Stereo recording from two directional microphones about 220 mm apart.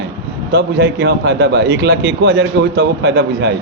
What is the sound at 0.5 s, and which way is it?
A man's voice, 50° right (ahead or behind).